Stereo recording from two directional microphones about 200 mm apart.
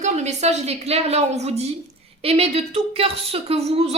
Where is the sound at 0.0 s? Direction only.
35° right (ahead or behind).